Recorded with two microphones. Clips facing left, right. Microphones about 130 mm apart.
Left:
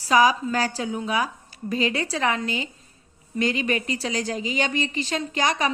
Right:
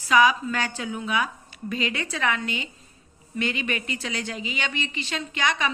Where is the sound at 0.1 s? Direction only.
35° left (ahead or behind).